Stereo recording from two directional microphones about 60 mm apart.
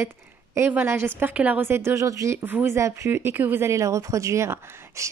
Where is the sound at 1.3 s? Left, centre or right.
Right.